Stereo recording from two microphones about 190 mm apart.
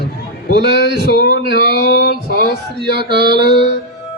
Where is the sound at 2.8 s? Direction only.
55° left (ahead or behind).